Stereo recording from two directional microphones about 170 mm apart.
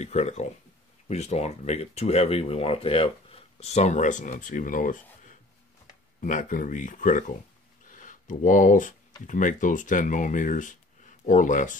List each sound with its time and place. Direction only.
0.0 s speech: 40° left (ahead or behind)